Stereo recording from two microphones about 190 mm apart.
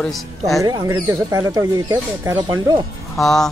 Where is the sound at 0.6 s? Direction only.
20° right (ahead or behind).